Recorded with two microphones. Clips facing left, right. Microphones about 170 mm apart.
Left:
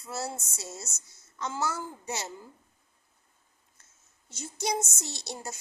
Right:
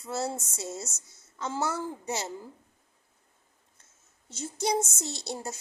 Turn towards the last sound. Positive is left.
turn(degrees=-25)  # may be behind; listen again after turning